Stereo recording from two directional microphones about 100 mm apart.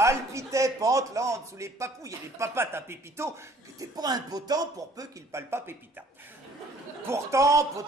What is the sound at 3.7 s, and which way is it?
Speech, 40° right (ahead or behind).